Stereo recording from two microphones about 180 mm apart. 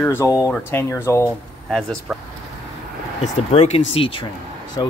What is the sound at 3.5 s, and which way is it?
Speech, 35° left (ahead or behind).